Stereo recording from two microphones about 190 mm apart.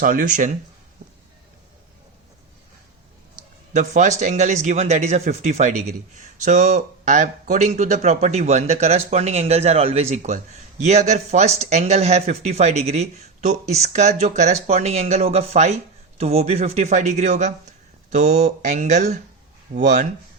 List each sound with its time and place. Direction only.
0.0 s speech: 45° right (ahead or behind)
3.7 s a man's voice: 40° right (ahead or behind)